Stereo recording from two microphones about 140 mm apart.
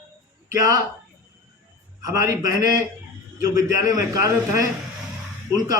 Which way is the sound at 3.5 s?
25° right (ahead or behind).